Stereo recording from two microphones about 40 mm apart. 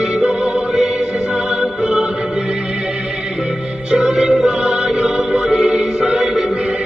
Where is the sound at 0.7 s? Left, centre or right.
Centre.